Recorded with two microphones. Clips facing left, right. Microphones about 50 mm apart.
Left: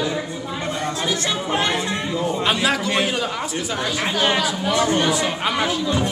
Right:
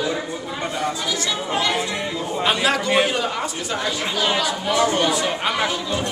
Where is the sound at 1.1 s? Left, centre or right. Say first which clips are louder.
Left 2 dB; left.